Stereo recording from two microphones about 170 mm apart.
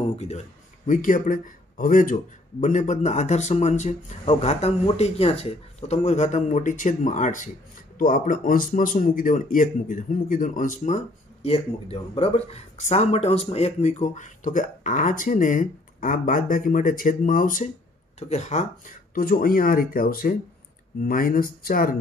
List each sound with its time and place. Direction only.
0.1 s speech: 40° left (ahead or behind)
0.8 s speech: 50° left (ahead or behind)
18.3 s speech: 40° left (ahead or behind)
19.1 s speech: 60° left (ahead or behind)